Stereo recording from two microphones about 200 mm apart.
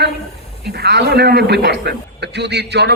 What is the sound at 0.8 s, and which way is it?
A man's voice, 55° right (ahead or behind).